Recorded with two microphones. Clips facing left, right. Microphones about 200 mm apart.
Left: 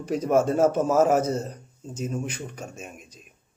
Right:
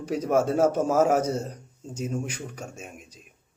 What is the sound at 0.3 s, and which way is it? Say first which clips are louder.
Speech: left 1 dB; 10° right (ahead or behind).